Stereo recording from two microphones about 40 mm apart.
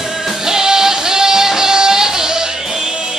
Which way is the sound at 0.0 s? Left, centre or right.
Centre.